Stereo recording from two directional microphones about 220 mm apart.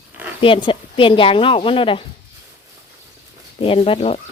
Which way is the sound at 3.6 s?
25° left (ahead or behind).